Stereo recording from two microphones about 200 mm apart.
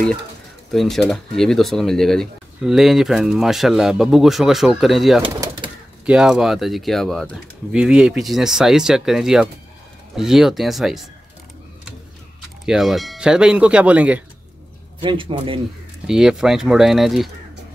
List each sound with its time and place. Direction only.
0.7 s speech: centre (ahead or behind)
5.2 s bird: 25° right (ahead or behind)
6.0 s speech: 5° right (ahead or behind)
12.4 s speech: centre (ahead or behind)
15.0 s speech: 25° right (ahead or behind)
16.1 s speech: centre (ahead or behind)